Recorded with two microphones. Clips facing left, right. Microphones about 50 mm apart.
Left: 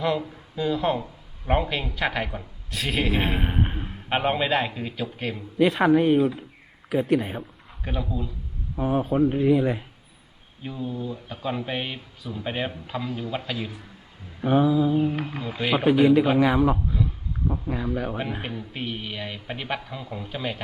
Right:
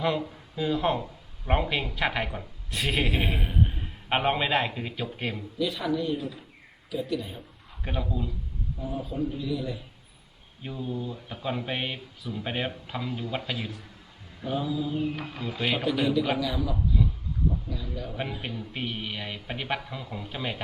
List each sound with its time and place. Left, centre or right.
0.0 s speech: centre
3.2 s speech: centre
3.4 s a sound: left
4.1 s speech: centre
5.5 s speech: left
7.9 s speech: centre
8.7 s speech: left
10.6 s speech: centre
14.4 s a sound: left
15.0 s speech: left
15.9 s a sound: left
16.4 s speech: left
18.7 s speech: centre